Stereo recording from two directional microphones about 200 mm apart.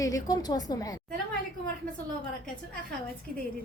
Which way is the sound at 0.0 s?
15° left (ahead or behind).